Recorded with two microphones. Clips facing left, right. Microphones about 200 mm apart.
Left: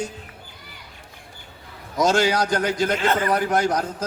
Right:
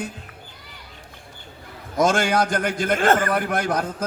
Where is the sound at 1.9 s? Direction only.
50° right (ahead or behind).